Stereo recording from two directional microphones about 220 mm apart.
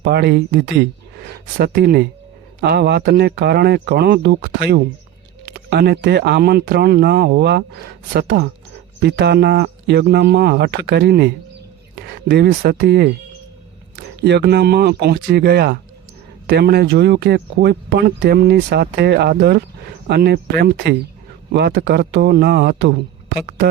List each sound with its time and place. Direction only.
0.0 s speech: 50° right (ahead or behind)